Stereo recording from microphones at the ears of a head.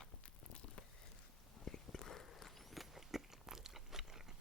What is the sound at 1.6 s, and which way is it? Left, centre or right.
Biting, left.